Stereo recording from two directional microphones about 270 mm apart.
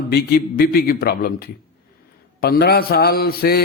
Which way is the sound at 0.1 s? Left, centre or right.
Left.